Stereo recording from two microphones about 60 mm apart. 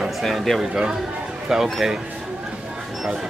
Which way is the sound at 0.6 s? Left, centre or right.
Centre.